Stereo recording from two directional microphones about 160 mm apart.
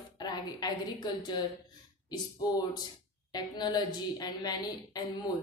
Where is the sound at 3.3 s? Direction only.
25° left (ahead or behind).